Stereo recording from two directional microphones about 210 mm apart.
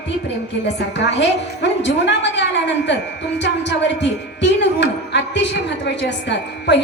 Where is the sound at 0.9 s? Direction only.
55° left (ahead or behind).